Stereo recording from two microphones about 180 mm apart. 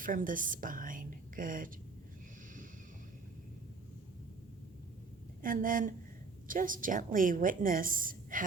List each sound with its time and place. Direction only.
0.0 s a woman's voice: 50° right (ahead or behind)
5.4 s a woman's voice: 50° right (ahead or behind)